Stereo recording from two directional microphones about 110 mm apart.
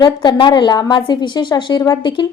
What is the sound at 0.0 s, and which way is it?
A woman's voice, 40° left (ahead or behind).